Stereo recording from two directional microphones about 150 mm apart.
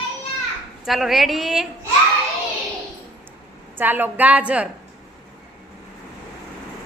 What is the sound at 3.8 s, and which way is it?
Speech, 15° right (ahead or behind).